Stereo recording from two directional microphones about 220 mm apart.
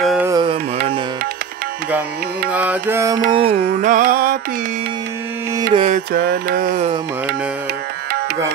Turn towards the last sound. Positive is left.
turn(degrees=-40)  # may be behind; listen again after turning